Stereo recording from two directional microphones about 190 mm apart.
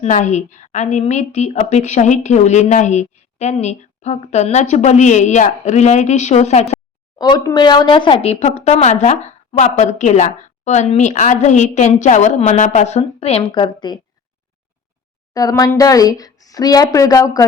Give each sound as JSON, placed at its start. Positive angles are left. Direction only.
{"t": 0.0, "sound": "speech", "side_deg": 40}
{"t": 7.2, "sound": "speech", "side_deg": 20}
{"t": 15.3, "sound": "speech", "side_deg": 20}